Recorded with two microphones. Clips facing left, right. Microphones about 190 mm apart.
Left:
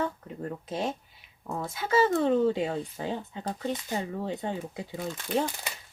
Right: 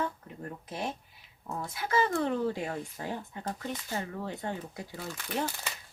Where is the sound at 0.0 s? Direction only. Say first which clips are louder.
Left 3 dB; 25° left (ahead or behind).